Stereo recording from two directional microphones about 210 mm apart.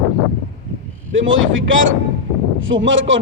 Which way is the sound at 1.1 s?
65° right (ahead or behind).